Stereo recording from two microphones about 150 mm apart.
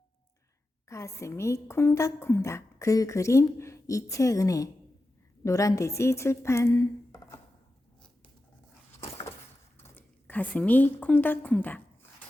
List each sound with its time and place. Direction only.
0.9 s a woman's voice: 20° left (ahead or behind)
9.7 s speech: 15° left (ahead or behind)